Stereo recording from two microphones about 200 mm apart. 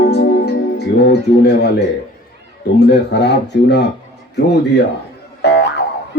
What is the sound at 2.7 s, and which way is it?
Speech, 55° left (ahead or behind).